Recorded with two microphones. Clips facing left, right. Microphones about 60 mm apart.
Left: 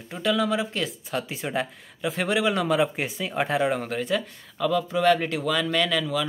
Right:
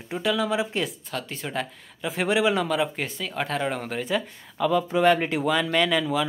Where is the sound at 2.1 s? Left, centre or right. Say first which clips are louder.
Right 2 dB; centre.